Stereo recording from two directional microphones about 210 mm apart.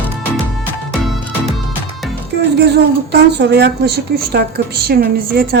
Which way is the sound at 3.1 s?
50° right (ahead or behind).